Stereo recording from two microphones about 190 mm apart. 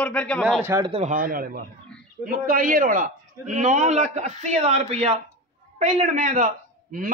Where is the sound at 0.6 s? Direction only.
15° right (ahead or behind).